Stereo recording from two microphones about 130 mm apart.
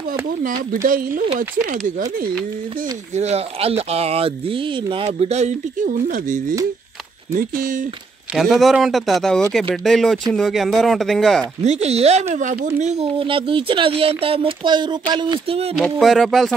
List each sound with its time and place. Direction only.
0.8 s speech: 90° right
3.2 s speech: 55° right (ahead or behind); by 7.8 s 90° right
8.4 s speech: centre (ahead or behind)
11.6 s speech: 55° right (ahead or behind)
13.2 s speech: 40° right (ahead or behind)
15.8 s speech: centre (ahead or behind)